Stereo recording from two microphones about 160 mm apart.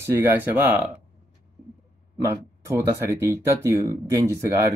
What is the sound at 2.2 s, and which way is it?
Speech, 15° right (ahead or behind).